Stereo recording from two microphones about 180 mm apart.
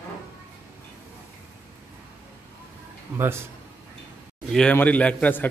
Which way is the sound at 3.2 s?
15° right (ahead or behind).